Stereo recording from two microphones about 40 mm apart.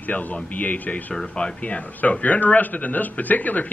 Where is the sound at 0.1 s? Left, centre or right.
Left.